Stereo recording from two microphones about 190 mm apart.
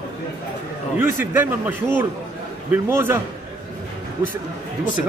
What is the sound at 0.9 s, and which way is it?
A man's voice, 10° right (ahead or behind).